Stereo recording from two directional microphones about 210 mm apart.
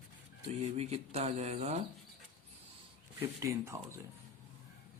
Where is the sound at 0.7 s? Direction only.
30° right (ahead or behind).